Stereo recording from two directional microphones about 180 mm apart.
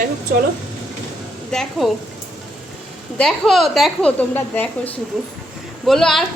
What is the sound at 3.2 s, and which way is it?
A woman's voice, centre (ahead or behind).